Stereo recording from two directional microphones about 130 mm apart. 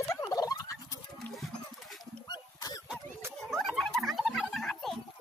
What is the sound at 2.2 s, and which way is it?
Dog, 30° left (ahead or behind).